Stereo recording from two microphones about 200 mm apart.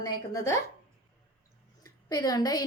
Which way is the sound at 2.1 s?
20° left (ahead or behind).